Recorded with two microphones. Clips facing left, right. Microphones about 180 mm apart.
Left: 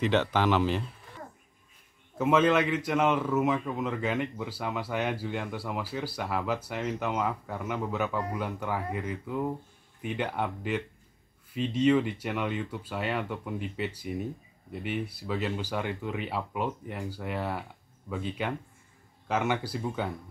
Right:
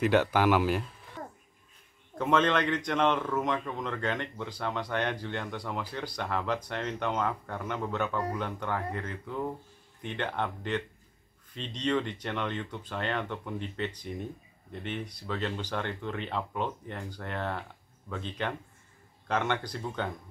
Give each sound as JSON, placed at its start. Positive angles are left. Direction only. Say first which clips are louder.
{"t": 0.0, "sound": "speech", "louder": "right 1 dB", "side_deg": -10}
{"t": 1.2, "sound": "a sound", "louder": "right 3 dB", "side_deg": -65}
{"t": 2.1, "sound": "a man's voice", "louder": "left 3 dB", "side_deg": 5}